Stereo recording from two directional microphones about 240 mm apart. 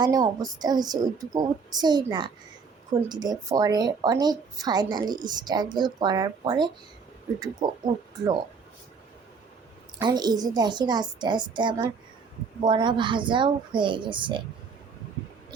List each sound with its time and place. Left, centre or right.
0.0 s a woman's voice: centre
10.0 s a woman's voice: centre